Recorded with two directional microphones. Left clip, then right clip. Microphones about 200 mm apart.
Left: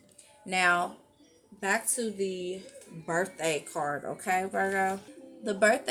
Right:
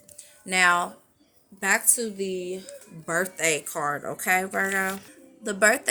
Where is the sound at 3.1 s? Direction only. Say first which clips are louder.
Right 4 dB; 35° right (ahead or behind).